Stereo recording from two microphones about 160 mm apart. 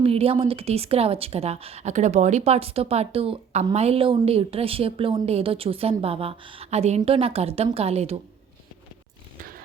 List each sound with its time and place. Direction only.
0.0 s speech: 40° right (ahead or behind)